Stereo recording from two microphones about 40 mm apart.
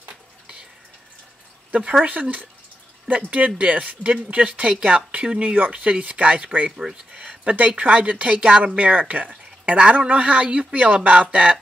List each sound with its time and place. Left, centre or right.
1.7 s speech: right
3.1 s a woman's voice: right
6.8 s a sound: right
7.5 s speech: right